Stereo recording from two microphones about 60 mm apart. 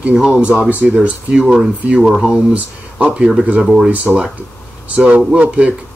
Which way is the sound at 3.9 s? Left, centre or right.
Right.